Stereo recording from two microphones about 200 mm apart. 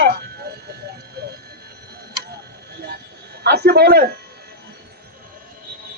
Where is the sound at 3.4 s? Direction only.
55° right (ahead or behind).